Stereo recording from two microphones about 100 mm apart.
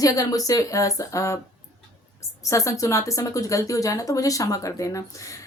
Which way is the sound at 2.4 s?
30° left (ahead or behind).